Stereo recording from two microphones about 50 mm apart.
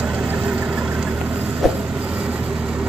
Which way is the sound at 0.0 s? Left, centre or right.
Right.